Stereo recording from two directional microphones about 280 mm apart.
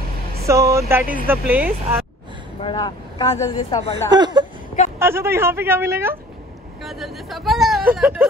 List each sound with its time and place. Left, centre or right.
0.5 s a woman's voice: centre
2.6 s speech: centre
4.1 s a woman's voice: centre